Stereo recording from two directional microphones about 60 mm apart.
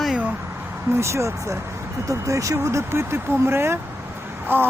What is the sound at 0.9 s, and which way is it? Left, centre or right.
Speech, right.